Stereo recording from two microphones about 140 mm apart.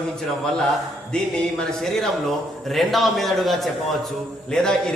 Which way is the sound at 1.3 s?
5° left (ahead or behind).